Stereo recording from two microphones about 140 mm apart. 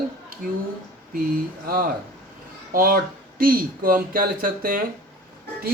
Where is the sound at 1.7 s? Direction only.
90° right.